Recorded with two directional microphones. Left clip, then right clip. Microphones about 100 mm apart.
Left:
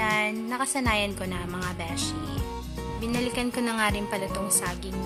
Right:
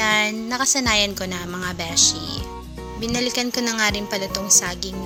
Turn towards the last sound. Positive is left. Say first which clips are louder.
# right 5 dB
turn(degrees=-35)  # may be behind; listen again after turning